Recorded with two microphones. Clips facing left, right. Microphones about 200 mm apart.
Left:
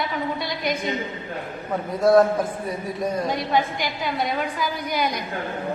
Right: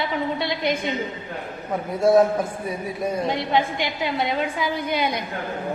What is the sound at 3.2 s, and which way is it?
A woman's voice, 25° right (ahead or behind).